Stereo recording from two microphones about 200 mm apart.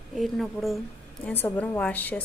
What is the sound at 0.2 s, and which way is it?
Speech, centre (ahead or behind).